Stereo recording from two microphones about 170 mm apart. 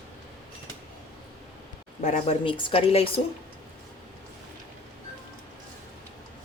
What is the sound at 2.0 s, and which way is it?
Speech, 45° left (ahead or behind).